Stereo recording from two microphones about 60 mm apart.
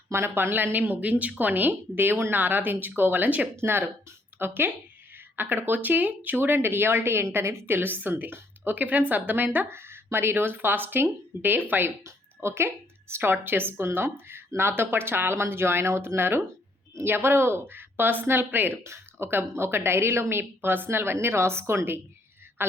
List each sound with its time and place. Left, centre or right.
0.1 s speech: right
3.5 s a woman's voice: right
7.8 s speech: right
12.0 s speech: right
18.8 s a woman's voice: right